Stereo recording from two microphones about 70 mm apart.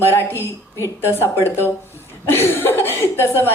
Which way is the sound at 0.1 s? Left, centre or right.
Left.